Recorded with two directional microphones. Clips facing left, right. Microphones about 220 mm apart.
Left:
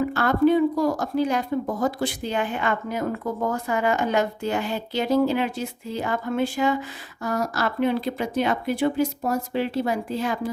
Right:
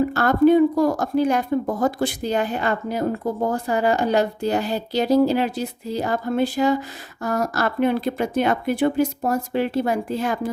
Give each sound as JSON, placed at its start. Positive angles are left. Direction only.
{"t": 0.0, "sound": "a woman's voice", "side_deg": -40}
{"t": 7.2, "sound": "speech", "side_deg": -50}